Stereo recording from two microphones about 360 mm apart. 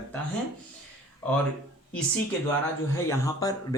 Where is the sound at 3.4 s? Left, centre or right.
Centre.